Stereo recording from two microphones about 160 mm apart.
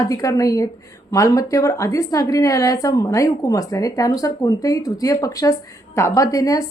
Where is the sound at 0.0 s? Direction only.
20° left (ahead or behind).